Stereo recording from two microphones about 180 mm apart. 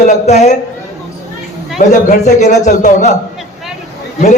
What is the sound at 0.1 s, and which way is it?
Speech, 40° left (ahead or behind).